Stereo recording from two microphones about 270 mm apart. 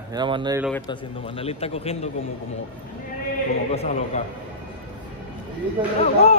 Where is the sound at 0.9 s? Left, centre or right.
Left.